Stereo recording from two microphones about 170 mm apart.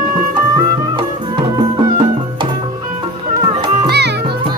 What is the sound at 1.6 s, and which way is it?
Music, 25° right (ahead or behind).